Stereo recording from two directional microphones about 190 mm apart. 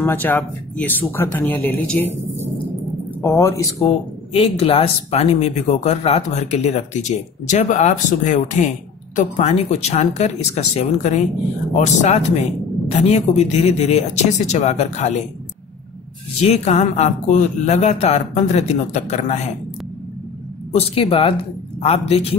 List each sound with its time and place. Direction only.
0.0 s speech: 10° left (ahead or behind)
3.2 s speech: 15° left (ahead or behind)
4.3 s speech: 30° left (ahead or behind)
16.3 s speech: 35° left (ahead or behind)
20.7 s speech: 30° left (ahead or behind)